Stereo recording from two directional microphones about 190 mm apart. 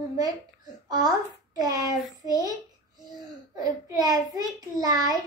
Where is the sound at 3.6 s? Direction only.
20° right (ahead or behind).